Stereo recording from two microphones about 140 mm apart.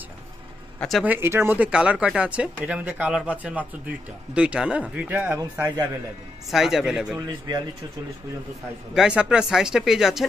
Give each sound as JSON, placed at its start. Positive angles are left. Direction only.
{"t": 0.7, "sound": "speech", "side_deg": 0}
{"t": 1.0, "sound": "a man's voice", "side_deg": -15}
{"t": 6.5, "sound": "speech", "side_deg": 0}
{"t": 7.2, "sound": "a man's voice", "side_deg": -30}
{"t": 8.9, "sound": "speech", "side_deg": -5}